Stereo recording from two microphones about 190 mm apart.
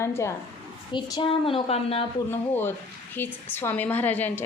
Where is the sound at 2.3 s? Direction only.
10° left (ahead or behind).